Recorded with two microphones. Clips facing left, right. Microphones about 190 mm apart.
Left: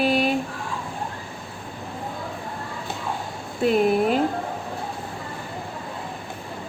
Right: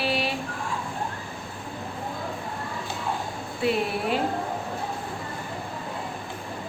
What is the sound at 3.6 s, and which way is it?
Speech, 45° left (ahead or behind).